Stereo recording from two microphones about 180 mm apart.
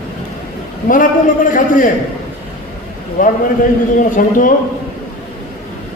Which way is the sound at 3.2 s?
50° left (ahead or behind).